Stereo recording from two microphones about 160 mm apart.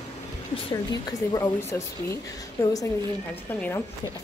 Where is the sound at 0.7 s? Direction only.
25° left (ahead or behind).